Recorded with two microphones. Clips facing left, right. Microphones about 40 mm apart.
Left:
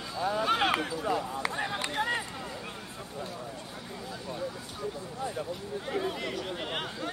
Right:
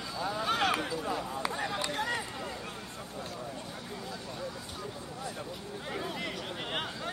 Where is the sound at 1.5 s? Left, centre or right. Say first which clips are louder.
Left 1 dB; centre.